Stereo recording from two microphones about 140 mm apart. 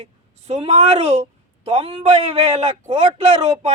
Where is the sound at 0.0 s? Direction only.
45° right (ahead or behind).